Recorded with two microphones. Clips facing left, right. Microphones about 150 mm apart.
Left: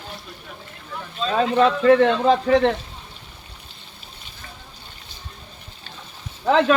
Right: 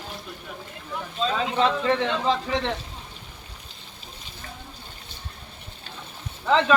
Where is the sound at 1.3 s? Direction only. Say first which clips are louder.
Left 7 dB; 55° left (ahead or behind).